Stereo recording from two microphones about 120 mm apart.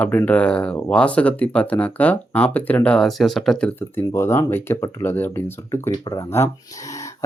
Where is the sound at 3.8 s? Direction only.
20° left (ahead or behind).